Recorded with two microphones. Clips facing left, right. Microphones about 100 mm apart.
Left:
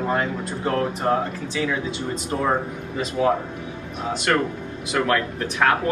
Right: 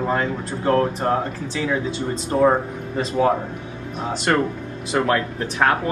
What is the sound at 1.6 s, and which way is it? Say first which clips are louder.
Speech: right 5 dB; 25° right (ahead or behind).